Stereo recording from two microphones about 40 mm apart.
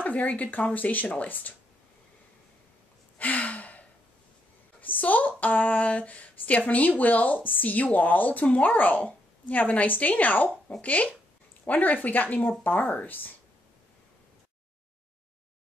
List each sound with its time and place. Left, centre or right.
0.0 s speech: left
3.2 s gasp: left
4.7 s speech: left